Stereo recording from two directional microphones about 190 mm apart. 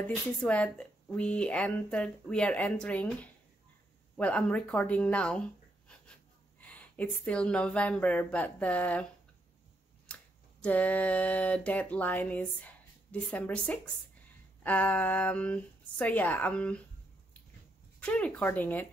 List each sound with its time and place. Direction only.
0.0 s speech: 5° left (ahead or behind)
6.6 s speech: 5° left (ahead or behind)
10.1 s a sound: 5° left (ahead or behind)
10.6 s speech: 10° left (ahead or behind)
18.0 s speech: 5° left (ahead or behind)